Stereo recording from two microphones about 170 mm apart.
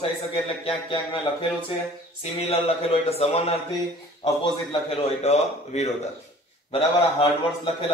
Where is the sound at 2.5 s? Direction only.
35° left (ahead or behind).